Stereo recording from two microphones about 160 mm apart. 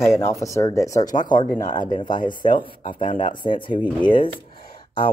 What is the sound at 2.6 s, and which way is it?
Speech, 30° left (ahead or behind).